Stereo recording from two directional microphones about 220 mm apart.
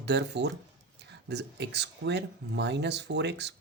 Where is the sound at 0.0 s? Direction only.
50° right (ahead or behind).